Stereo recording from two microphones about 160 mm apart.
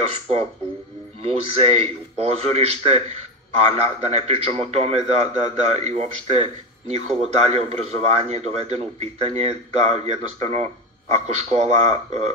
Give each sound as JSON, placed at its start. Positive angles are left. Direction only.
{"t": 1.2, "sound": "a man's voice", "side_deg": -40}